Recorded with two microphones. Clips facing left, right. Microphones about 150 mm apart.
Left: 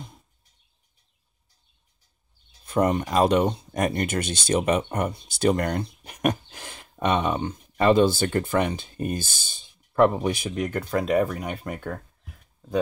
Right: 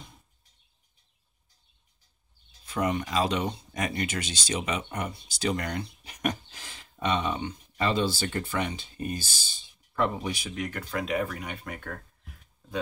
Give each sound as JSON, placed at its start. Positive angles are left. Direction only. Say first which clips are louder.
{"t": 2.6, "sound": "speech", "louder": "left 6 dB", "side_deg": 50}